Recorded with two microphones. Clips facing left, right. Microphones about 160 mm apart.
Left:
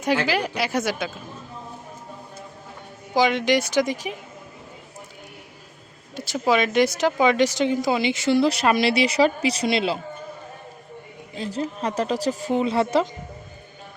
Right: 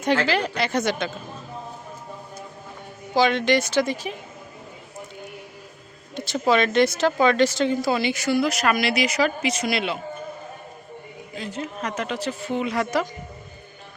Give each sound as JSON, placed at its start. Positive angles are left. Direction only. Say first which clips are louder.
{"t": 0.0, "sound": "a woman's voice", "louder": "right 1 dB", "side_deg": 10}
{"t": 3.2, "sound": "a woman's voice", "louder": "even", "side_deg": 15}
{"t": 6.1, "sound": "speech", "louder": "right 1 dB", "side_deg": 10}
{"t": 11.3, "sound": "speech", "louder": "left 3 dB", "side_deg": 35}